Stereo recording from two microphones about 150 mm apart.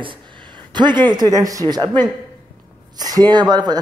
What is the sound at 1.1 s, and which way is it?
A man's voice, 25° right (ahead or behind).